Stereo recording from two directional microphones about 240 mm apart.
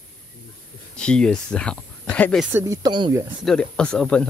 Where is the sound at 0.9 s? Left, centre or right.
Centre.